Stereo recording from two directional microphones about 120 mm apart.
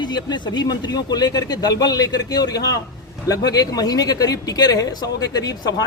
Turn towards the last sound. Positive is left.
turn(degrees=30)  # may be behind; listen again after turning